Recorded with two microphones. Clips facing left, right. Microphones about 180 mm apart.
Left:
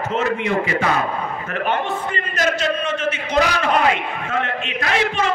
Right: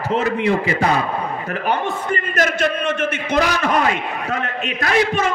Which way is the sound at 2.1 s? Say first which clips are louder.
Right 4 dB; 55° right (ahead or behind).